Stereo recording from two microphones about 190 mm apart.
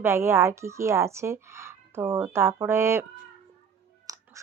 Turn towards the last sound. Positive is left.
turn(degrees=-20)  # may be behind; listen again after turning